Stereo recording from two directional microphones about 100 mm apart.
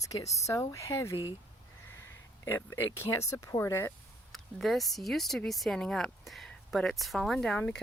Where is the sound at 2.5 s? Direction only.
20° left (ahead or behind).